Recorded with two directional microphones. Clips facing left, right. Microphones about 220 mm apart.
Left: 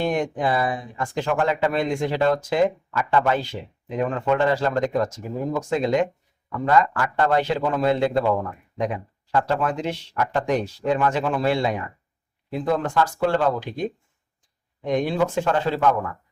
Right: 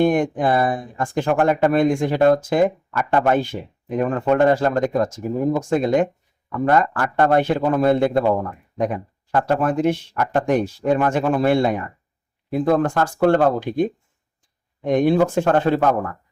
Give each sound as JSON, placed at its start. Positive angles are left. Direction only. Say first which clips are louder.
{"t": 0.0, "sound": "speech", "louder": "right 5 dB", "side_deg": -50}
{"t": 14.8, "sound": "speech", "louder": "right 5 dB", "side_deg": -50}